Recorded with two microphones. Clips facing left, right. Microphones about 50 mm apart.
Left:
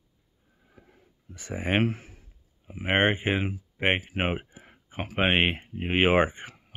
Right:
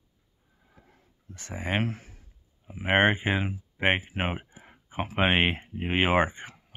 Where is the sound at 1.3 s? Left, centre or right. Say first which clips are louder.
Left 3 dB; centre.